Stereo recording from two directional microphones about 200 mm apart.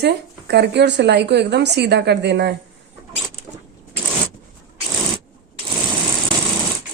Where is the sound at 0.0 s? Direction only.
55° right (ahead or behind).